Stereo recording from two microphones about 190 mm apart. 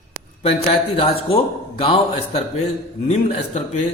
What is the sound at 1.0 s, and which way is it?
A man's voice, 30° left (ahead or behind).